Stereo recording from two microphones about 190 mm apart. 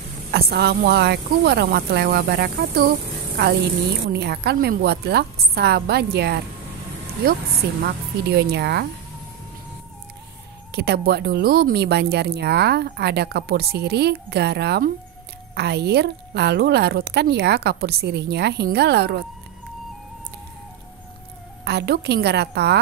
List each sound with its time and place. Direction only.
0.3 s speech: 55° right (ahead or behind)
4.1 s speech: 60° right (ahead or behind)
10.7 s speech: 55° right (ahead or behind)
21.6 s speech: 60° right (ahead or behind)